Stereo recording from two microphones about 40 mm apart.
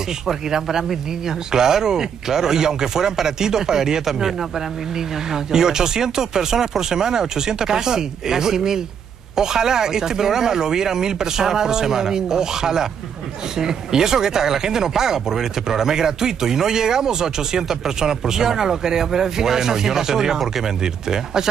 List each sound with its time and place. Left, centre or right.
0.3 s speech: centre
5.3 s speech: centre